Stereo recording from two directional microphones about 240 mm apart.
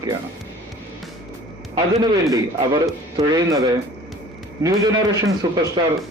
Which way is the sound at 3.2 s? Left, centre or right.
Centre.